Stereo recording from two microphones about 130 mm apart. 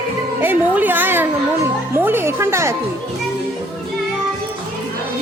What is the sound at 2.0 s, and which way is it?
Music, 20° right (ahead or behind).